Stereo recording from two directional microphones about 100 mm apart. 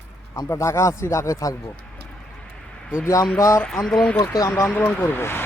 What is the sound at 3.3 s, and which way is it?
Speech, 30° left (ahead or behind).